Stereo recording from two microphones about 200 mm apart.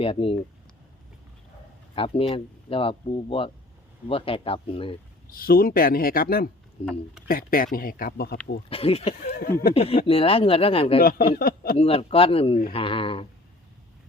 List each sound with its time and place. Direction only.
0.0 s speech: 30° left (ahead or behind)
2.0 s speech: 25° left (ahead or behind)
5.3 s speech: 45° left (ahead or behind)
6.8 s speech: 30° left (ahead or behind)
7.3 s speech: 45° left (ahead or behind)
8.7 s speech: 30° left (ahead or behind)
11.3 s speech: 45° left (ahead or behind)
11.8 s speech: 30° left (ahead or behind)